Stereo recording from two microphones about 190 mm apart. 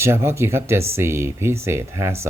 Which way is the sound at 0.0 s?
15° right (ahead or behind).